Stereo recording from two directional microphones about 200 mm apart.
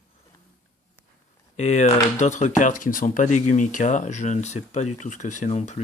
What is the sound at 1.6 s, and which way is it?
Speech, 35° left (ahead or behind).